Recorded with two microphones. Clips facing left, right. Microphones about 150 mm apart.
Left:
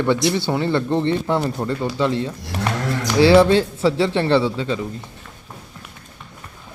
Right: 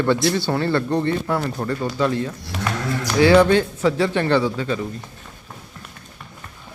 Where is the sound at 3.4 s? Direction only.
30° left (ahead or behind).